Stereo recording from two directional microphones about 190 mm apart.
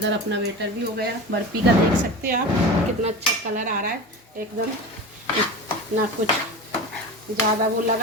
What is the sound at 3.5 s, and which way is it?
Dishes, 45° right (ahead or behind).